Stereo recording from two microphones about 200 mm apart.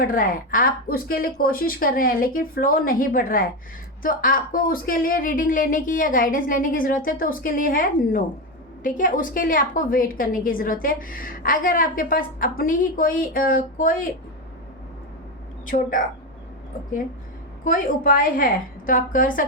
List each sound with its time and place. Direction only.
0.0 s a woman's voice: 45° left (ahead or behind)
15.6 s a woman's voice: 40° left (ahead or behind)
17.6 s a woman's voice: 40° left (ahead or behind)